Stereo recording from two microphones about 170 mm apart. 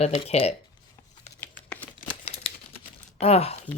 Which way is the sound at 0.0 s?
35° left (ahead or behind).